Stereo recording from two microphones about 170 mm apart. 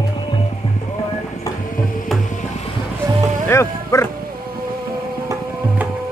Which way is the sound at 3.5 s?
15° left (ahead or behind).